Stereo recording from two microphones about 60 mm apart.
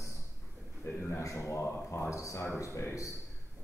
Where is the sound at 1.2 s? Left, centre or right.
Left.